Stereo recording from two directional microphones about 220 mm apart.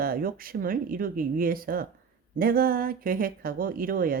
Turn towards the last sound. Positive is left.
turn(degrees=-40)  # may be behind; listen again after turning